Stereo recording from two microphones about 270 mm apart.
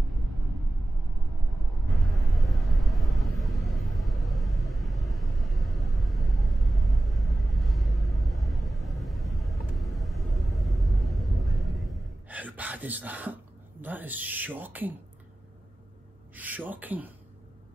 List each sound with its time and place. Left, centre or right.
1.9 s vehicle: centre
16.3 s speech: centre